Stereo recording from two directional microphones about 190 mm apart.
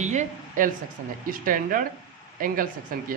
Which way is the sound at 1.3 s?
45° right (ahead or behind).